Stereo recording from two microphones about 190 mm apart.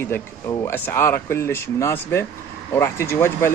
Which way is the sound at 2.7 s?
15° left (ahead or behind).